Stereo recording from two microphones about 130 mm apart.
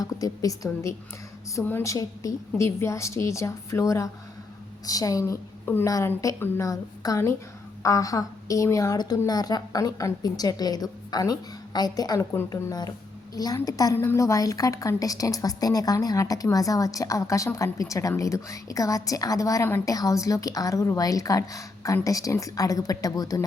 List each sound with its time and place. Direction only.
0.0 s a woman's voice: 25° left (ahead or behind)